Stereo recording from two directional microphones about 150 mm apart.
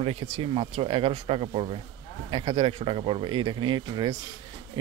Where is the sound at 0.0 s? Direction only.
40° right (ahead or behind).